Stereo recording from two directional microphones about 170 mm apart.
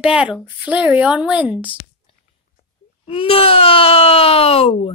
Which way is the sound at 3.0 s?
35° left (ahead or behind).